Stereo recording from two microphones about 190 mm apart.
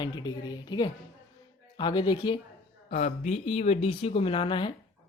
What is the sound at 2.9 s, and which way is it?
Speech, 35° left (ahead or behind).